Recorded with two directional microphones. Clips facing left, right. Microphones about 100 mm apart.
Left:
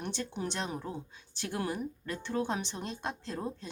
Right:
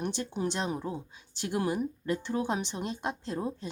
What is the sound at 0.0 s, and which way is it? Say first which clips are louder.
Speech: right 4 dB; 15° right (ahead or behind).